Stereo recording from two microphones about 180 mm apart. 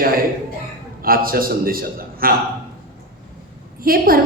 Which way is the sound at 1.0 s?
55° right (ahead or behind).